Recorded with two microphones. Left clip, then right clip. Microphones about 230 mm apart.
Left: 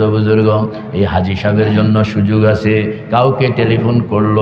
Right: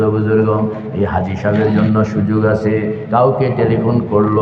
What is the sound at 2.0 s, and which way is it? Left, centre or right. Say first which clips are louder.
A man's voice: left 2 dB; left.